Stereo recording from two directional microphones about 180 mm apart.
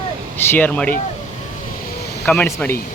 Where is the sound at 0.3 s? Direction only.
10° left (ahead or behind).